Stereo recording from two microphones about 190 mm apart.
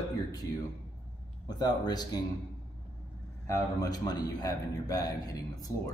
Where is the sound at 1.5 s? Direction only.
20° left (ahead or behind).